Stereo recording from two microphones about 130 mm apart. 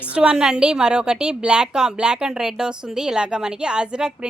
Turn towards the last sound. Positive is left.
turn(degrees=-5)  # may be behind; listen again after turning